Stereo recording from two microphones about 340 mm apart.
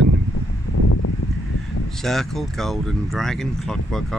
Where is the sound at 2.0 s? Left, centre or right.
Centre.